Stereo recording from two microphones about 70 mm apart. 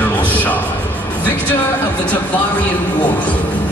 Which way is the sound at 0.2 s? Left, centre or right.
Left.